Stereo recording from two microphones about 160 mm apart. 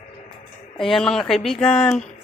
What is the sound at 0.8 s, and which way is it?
Speech, centre (ahead or behind).